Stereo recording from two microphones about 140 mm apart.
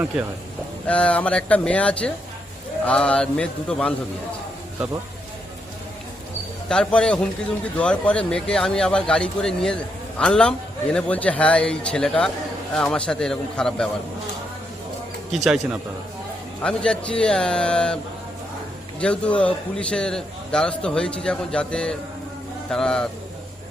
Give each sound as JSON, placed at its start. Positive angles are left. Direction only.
{"t": 0.9, "sound": "a man's voice", "side_deg": 10}
{"t": 6.7, "sound": "a man's voice", "side_deg": 5}
{"t": 15.4, "sound": "speech", "side_deg": -5}
{"t": 16.6, "sound": "a man's voice", "side_deg": 5}